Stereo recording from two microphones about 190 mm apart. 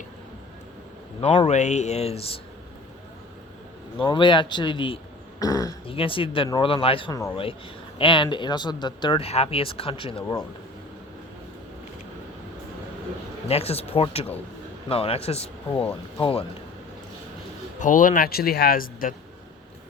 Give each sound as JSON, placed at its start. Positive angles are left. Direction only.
{"t": 1.5, "sound": "speech", "side_deg": 35}
{"t": 3.9, "sound": "speech", "side_deg": 25}
{"t": 13.5, "sound": "speech", "side_deg": 30}
{"t": 15.8, "sound": "speech", "side_deg": 10}
{"t": 17.7, "sound": "speech", "side_deg": 45}